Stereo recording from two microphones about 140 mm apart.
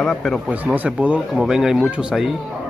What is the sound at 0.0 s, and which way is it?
Speech, centre (ahead or behind).